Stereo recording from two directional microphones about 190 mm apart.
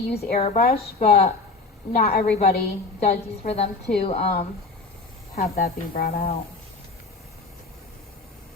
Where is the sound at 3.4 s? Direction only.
45° left (ahead or behind).